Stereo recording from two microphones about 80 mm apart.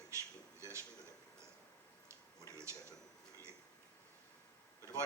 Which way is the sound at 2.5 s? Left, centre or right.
Right.